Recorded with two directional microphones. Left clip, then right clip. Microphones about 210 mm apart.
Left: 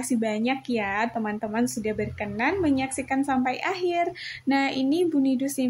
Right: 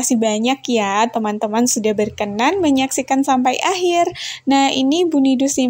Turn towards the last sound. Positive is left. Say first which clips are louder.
# right 9 dB
turn(degrees=-30)  # may be behind; listen again after turning